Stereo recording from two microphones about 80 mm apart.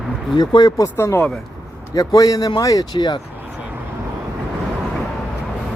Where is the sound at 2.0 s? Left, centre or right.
Left.